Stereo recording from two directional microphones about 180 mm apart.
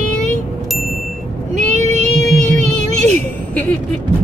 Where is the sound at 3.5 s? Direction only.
10° left (ahead or behind).